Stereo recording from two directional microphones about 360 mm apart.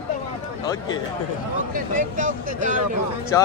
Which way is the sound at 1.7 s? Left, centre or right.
Right.